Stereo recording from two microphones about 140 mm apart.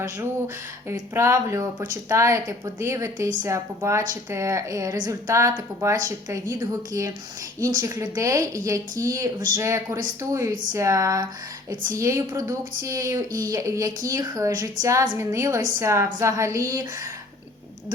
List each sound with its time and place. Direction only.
0.0 s a woman's voice: 20° right (ahead or behind)